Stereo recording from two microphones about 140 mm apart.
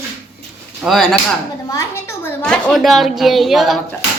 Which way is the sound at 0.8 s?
Centre (ahead or behind).